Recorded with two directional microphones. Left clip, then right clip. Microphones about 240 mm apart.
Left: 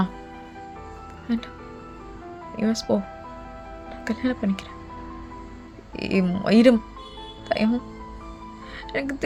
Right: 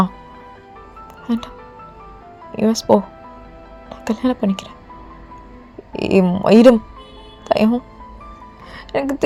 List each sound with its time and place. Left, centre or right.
2.6 s speech: centre
4.0 s speech: centre
6.0 s speech: centre
8.7 s music: centre